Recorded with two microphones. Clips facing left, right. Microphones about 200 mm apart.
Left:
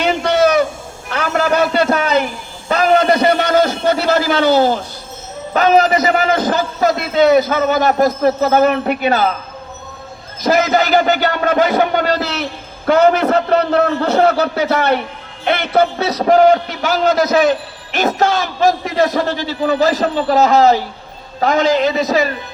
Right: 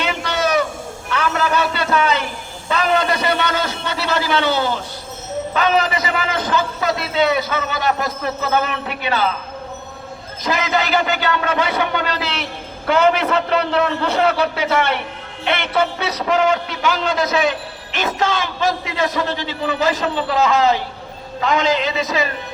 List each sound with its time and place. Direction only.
0.0 s a sound: 40° left (ahead or behind)
5.5 s a man's voice: 40° left (ahead or behind)
10.4 s a man's voice: 40° left (ahead or behind)